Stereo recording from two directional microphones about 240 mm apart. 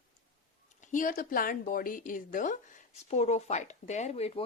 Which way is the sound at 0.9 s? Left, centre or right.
Left.